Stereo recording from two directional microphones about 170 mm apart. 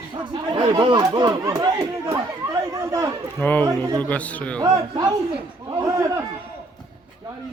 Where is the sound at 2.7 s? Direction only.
20° right (ahead or behind).